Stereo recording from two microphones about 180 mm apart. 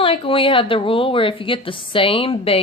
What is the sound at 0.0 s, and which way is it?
A woman's voice, 30° left (ahead or behind).